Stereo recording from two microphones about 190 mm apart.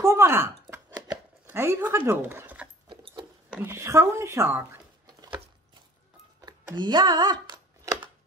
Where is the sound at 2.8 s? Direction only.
25° right (ahead or behind).